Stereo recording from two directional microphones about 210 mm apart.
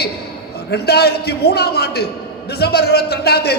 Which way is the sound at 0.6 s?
50° left (ahead or behind).